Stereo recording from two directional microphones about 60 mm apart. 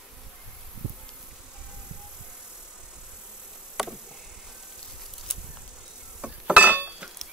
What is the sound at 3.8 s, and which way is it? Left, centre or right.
Chop, centre.